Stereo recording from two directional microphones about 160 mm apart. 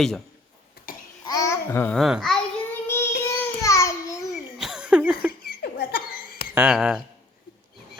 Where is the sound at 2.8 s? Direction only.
15° left (ahead or behind).